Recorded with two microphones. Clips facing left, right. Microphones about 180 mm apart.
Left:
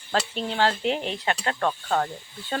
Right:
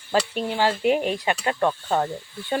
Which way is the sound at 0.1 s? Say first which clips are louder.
Right 4 dB; 10° right (ahead or behind).